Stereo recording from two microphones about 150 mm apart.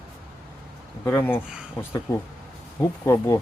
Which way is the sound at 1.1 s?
15° left (ahead or behind).